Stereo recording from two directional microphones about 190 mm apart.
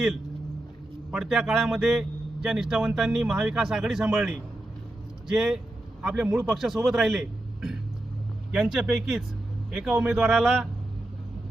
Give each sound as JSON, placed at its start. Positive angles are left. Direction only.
{"t": 1.1, "sound": "a man's voice", "side_deg": 0}